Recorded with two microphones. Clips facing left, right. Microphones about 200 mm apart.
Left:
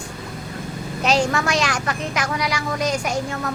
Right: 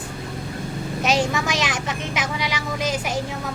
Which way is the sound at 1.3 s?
5° right (ahead or behind).